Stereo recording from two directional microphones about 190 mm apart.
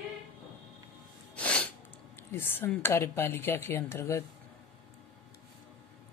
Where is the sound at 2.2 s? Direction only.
10° left (ahead or behind).